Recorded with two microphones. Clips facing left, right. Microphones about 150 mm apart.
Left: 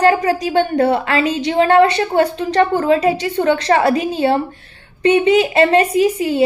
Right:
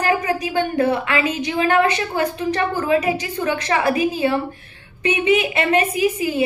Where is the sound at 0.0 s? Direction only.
35° left (ahead or behind).